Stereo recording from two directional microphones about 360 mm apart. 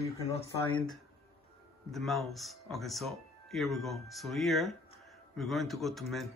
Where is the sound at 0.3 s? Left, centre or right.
Centre.